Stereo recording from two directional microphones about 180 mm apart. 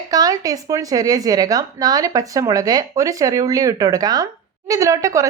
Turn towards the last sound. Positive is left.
turn(degrees=-20)  # may be behind; listen again after turning